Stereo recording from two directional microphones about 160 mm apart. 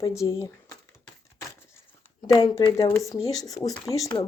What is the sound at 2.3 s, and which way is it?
Speech, 25° left (ahead or behind).